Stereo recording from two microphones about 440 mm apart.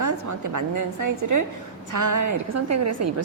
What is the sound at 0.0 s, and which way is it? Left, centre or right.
A woman's voice, right.